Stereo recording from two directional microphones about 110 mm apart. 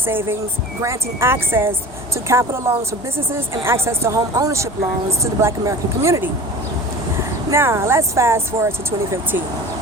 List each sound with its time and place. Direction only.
0.0 s speech: 20° right (ahead or behind)
7.5 s speech: 25° right (ahead or behind)